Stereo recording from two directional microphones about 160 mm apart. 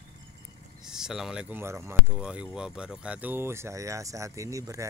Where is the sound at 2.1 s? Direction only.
5° right (ahead or behind).